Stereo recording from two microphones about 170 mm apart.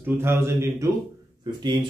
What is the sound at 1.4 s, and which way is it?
Speech, 25° right (ahead or behind).